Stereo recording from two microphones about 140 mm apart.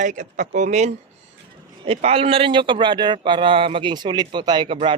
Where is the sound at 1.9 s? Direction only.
45° right (ahead or behind).